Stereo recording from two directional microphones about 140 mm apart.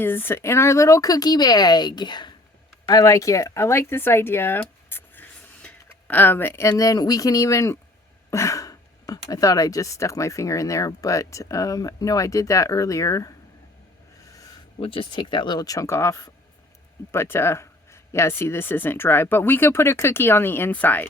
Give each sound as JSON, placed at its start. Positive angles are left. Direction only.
{"t": 0.0, "sound": "speech", "side_deg": 15}
{"t": 14.8, "sound": "speech", "side_deg": 40}